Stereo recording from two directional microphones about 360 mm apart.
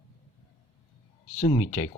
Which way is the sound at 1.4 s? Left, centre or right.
Centre.